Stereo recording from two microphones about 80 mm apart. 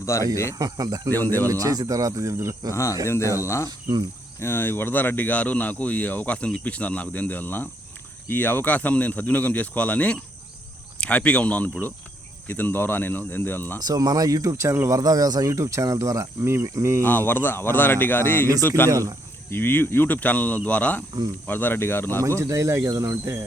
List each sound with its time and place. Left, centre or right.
0.0 s speech: left
0.6 s speech: right
1.1 s speech: left
1.5 s speech: right
2.7 s speech: left
3.7 s speech: right
4.4 s speech: left
13.7 s speech: right
14.5 s speech: right
15.5 s speech: right
17.0 s speech: left
18.9 s speech: right
19.5 s speech: left
22.4 s speech: right